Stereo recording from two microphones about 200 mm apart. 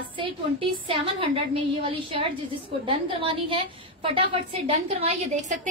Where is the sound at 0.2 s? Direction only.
25° right (ahead or behind).